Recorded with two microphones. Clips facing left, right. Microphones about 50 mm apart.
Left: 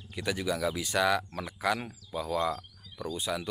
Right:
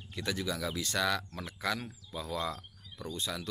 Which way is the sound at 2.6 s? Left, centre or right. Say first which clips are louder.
Left 5 dB; centre.